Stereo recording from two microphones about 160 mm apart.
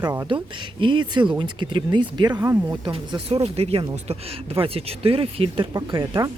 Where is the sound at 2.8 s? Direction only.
30° right (ahead or behind).